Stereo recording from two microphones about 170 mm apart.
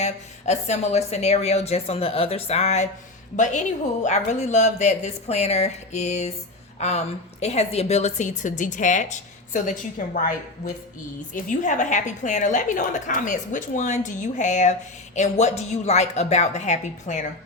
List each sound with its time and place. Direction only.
0.0 s a woman's voice: 40° left (ahead or behind)
11.3 s a woman's voice: 50° left (ahead or behind)